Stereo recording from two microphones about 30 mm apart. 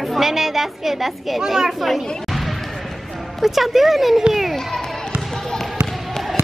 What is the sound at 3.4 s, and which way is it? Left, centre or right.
Speech, centre.